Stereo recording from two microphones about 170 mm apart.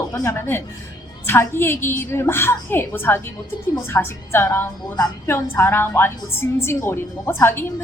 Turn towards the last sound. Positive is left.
turn(degrees=15)  # may be behind; listen again after turning